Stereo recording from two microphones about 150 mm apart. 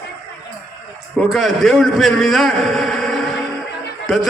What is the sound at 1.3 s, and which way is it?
A man's voice, centre (ahead or behind).